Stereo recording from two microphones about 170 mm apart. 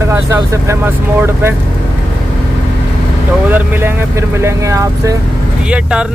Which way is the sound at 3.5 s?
10° right (ahead or behind).